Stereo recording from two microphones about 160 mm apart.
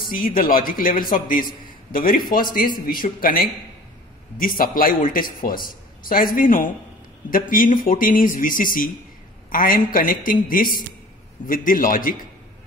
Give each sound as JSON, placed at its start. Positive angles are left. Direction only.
{"t": 0.1, "sound": "speech", "side_deg": 60}